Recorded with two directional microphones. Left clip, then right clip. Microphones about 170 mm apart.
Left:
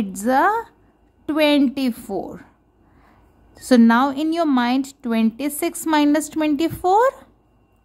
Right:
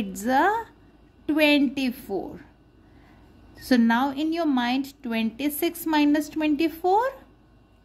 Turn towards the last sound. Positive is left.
turn(degrees=35)  # may be behind; listen again after turning